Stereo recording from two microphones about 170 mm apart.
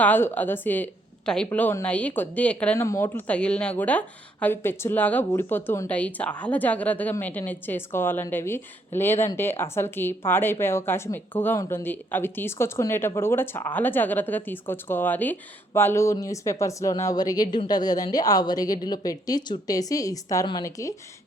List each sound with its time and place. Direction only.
0.0 s a woman's voice: 10° left (ahead or behind)